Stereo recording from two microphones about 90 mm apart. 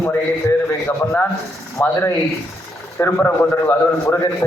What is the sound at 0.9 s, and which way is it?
Speech, 20° left (ahead or behind).